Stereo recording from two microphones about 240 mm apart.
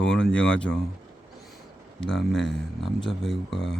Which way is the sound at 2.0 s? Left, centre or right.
Centre.